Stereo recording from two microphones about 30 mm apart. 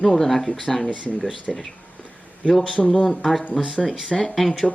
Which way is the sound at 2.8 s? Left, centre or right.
Left.